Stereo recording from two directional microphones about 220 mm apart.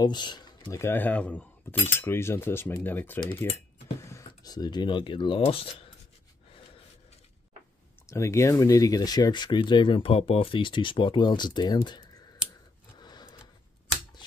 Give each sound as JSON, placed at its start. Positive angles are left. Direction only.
{"t": 0.0, "sound": "speech", "side_deg": 20}
{"t": 2.0, "sound": "cutlery", "side_deg": 10}
{"t": 4.1, "sound": "speech", "side_deg": 15}
{"t": 8.1, "sound": "speech", "side_deg": 15}
{"t": 13.0, "sound": "a sound", "side_deg": 20}